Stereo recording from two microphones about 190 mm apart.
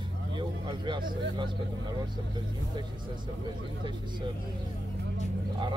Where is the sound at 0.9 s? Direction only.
25° right (ahead or behind).